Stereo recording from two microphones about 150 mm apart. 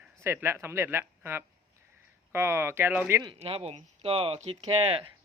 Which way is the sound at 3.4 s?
40° right (ahead or behind).